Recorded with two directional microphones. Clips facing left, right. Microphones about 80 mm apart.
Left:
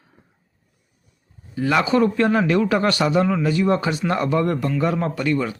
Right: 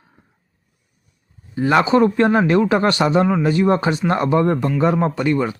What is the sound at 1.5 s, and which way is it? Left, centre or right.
Speech, right.